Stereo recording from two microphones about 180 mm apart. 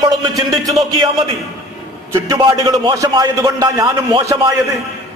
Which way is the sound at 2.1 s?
15° right (ahead or behind).